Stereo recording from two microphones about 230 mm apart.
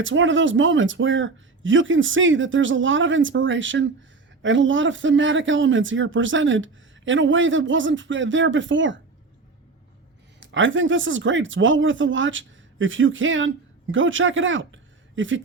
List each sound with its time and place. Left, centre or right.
0.0 s speech: right
10.4 s speech: right